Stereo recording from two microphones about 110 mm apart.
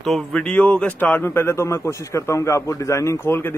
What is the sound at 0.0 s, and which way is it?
A man's voice, centre (ahead or behind).